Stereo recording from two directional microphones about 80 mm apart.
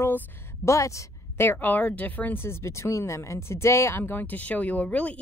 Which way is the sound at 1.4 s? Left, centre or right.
Left.